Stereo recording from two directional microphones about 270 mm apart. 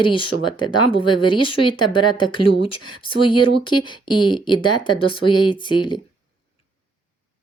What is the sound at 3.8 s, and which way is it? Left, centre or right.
Speech, centre.